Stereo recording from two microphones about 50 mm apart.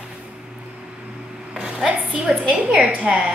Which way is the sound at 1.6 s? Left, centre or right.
Centre.